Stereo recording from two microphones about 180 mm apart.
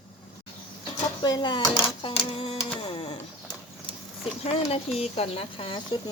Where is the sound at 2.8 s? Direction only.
30° left (ahead or behind).